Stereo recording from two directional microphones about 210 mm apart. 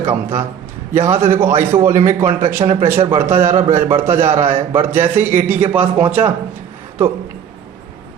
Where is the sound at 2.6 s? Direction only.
25° right (ahead or behind).